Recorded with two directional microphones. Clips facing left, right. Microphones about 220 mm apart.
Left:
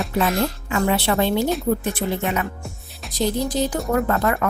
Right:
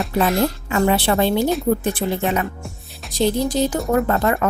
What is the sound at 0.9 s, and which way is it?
A woman's voice, 35° right (ahead or behind).